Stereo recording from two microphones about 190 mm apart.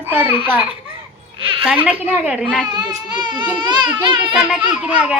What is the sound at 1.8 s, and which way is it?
Speech, 10° right (ahead or behind).